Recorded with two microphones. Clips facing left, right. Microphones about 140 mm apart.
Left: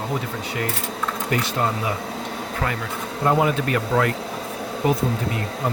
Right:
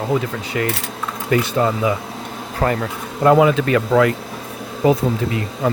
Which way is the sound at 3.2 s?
90° right.